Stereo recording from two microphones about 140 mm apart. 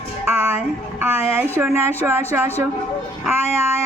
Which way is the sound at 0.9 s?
15° right (ahead or behind).